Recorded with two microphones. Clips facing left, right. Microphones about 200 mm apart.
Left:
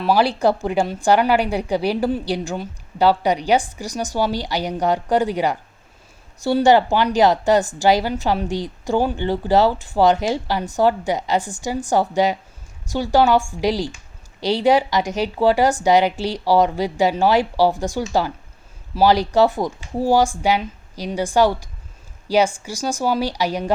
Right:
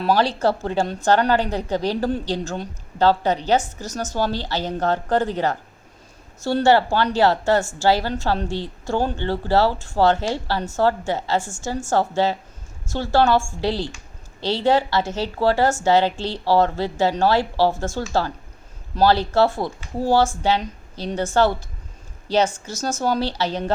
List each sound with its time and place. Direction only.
0.0 s a woman's voice: 10° left (ahead or behind)